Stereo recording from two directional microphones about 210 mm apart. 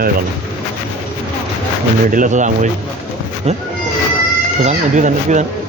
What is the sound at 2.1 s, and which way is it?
Speech, 40° right (ahead or behind).